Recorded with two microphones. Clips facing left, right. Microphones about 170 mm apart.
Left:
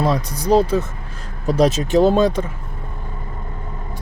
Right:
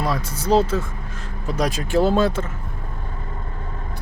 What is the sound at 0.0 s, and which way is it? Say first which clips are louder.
Speech: left 5 dB; 20° left (ahead or behind).